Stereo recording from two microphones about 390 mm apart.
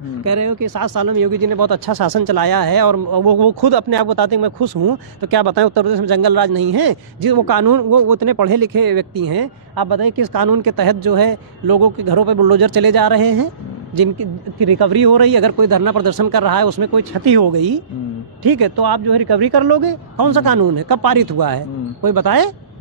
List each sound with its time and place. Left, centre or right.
0.2 s speech: right